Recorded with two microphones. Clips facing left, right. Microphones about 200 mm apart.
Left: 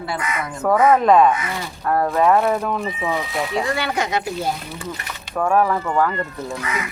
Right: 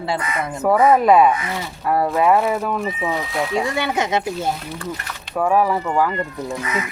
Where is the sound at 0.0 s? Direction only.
25° right (ahead or behind).